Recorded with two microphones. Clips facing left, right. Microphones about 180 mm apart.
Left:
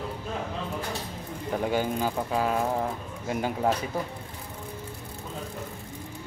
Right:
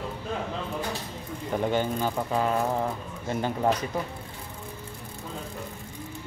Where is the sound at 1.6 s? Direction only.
10° left (ahead or behind).